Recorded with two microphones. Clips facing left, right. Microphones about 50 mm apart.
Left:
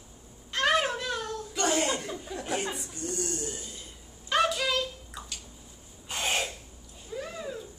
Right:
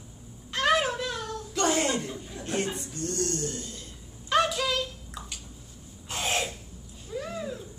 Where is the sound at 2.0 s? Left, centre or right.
Left.